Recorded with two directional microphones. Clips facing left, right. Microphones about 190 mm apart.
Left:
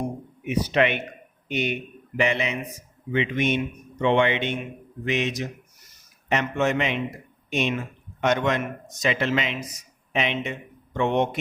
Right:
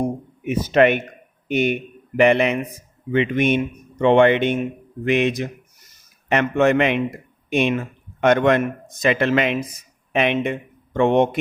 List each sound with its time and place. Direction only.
0.4 s speech: 45° right (ahead or behind)